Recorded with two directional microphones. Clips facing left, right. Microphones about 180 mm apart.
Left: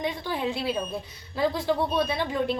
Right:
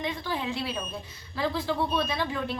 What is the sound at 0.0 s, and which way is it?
A woman's voice, 15° left (ahead or behind).